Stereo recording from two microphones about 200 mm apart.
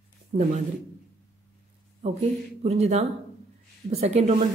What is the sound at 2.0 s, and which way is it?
A woman's voice, 30° right (ahead or behind).